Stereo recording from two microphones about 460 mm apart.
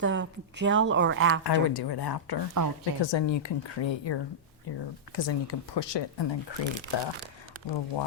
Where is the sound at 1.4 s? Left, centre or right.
Left.